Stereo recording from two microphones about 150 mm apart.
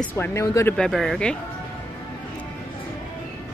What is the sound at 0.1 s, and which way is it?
Speech, 20° left (ahead or behind).